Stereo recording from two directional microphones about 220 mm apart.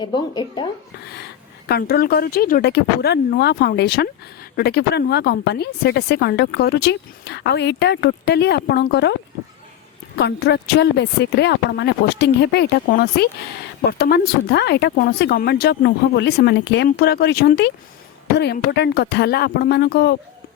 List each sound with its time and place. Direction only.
0.0 s speech: 20° left (ahead or behind)
1.1 s a woman's voice: 45° left (ahead or behind)
10.2 s a woman's voice: 50° left (ahead or behind)